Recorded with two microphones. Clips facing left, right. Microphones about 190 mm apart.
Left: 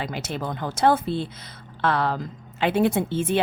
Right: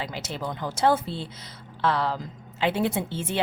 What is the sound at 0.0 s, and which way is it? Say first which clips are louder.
A woman's voice: left 3 dB; 55° left (ahead or behind).